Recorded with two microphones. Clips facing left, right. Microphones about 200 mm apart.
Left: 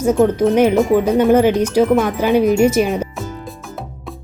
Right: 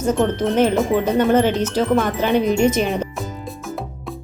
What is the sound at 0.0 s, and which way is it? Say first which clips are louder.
Speech: left 5 dB; 10° left (ahead or behind).